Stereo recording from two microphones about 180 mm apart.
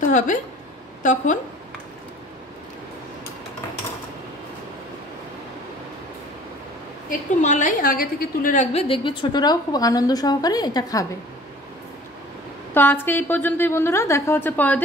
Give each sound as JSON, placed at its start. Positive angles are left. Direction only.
{"t": 1.0, "sound": "a woman's voice", "side_deg": 45}
{"t": 7.1, "sound": "a woman's voice", "side_deg": 45}
{"t": 8.7, "sound": "a woman's voice", "side_deg": 30}
{"t": 12.7, "sound": "a woman's voice", "side_deg": 10}